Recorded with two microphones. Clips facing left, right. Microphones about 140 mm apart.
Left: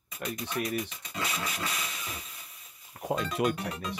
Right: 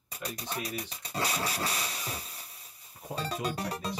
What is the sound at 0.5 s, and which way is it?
Speech, 35° right (ahead or behind).